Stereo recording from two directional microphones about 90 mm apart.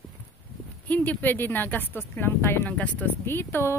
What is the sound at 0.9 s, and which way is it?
Speech, 20° left (ahead or behind).